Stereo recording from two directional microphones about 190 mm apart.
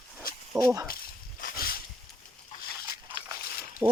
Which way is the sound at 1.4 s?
50° left (ahead or behind).